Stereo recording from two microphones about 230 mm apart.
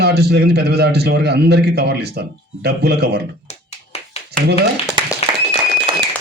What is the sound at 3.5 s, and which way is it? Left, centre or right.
Clapping, left.